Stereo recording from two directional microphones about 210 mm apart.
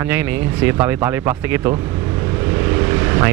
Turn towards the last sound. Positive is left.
turn(degrees=-15)  # may be behind; listen again after turning